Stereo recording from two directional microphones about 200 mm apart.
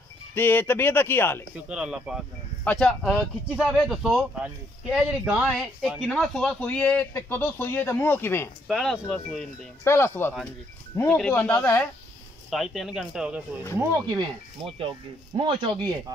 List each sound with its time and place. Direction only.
0.3 s speech: 10° left (ahead or behind)
1.7 s speech: 5° right (ahead or behind)
9.8 s speech: 10° left (ahead or behind)
14.0 s speech: 25° right (ahead or behind)